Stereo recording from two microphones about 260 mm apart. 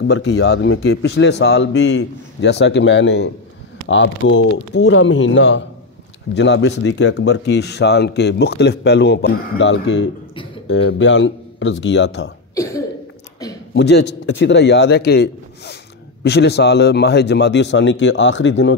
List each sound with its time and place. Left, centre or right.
0.0 s a man's voice: left
13.7 s a man's voice: left